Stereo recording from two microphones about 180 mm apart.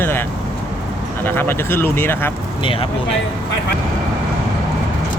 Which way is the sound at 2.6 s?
30° left (ahead or behind).